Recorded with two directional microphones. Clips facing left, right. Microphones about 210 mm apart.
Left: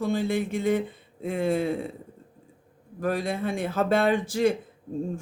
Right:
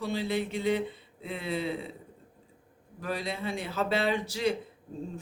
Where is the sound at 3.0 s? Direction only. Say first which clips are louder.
Left 7 dB; 50° left (ahead or behind).